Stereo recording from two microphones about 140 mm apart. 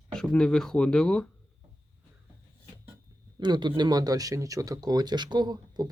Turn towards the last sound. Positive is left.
turn(degrees=-30)  # may be behind; listen again after turning